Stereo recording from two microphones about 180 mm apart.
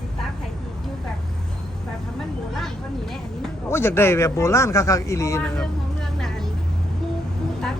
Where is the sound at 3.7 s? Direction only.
15° left (ahead or behind).